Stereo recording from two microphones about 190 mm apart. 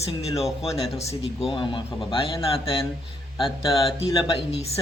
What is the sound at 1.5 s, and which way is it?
A man's voice, 25° left (ahead or behind).